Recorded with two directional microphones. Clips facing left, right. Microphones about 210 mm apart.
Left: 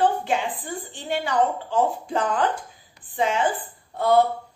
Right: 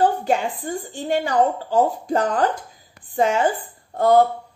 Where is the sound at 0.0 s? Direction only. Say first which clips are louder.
Right 3 dB; 40° right (ahead or behind).